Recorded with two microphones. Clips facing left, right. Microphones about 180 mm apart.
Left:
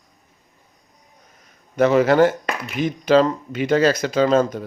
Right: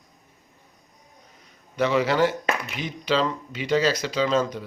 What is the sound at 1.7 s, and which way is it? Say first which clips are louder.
Speech: left 7 dB; 50° left (ahead or behind).